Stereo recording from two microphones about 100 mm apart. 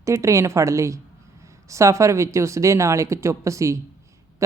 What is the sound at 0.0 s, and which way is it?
Speech, 30° right (ahead or behind).